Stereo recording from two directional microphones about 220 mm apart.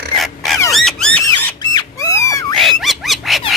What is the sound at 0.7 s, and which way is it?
Squawk, centre (ahead or behind).